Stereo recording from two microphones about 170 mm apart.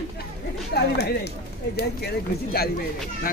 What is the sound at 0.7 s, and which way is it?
Speech, 70° left (ahead or behind).